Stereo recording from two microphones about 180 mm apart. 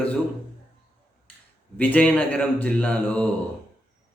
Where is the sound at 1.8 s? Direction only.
10° left (ahead or behind).